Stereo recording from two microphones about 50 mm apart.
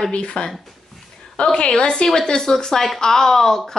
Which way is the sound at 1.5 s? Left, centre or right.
Centre.